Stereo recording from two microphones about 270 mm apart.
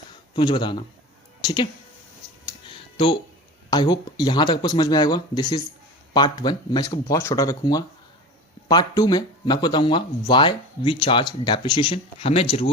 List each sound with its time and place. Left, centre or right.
0.3 s speech: centre
2.6 s music: centre
3.7 s speech: centre